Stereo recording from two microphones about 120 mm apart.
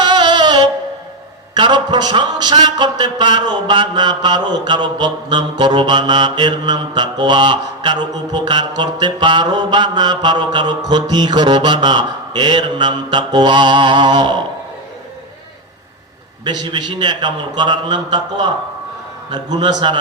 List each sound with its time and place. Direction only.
0.0 s music: 35° right (ahead or behind)
1.5 s a man's voice: 40° right (ahead or behind)
16.4 s a man's voice: 40° right (ahead or behind)